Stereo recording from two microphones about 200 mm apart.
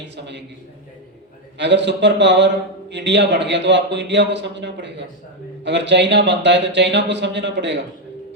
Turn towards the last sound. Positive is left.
turn(degrees=-60)  # may be behind; listen again after turning